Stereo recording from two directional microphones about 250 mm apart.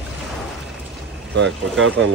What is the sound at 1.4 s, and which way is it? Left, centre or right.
Speech, right.